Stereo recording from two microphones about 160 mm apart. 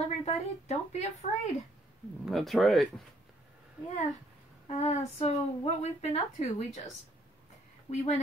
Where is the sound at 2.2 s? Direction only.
Centre (ahead or behind).